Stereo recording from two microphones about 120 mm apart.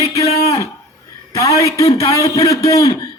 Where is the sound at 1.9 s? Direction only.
25° left (ahead or behind).